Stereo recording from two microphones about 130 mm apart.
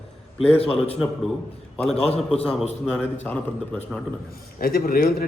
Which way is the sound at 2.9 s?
10° left (ahead or behind).